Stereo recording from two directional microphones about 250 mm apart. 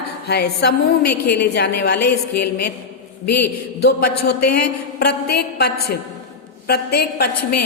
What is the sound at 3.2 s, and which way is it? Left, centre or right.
Speech, left.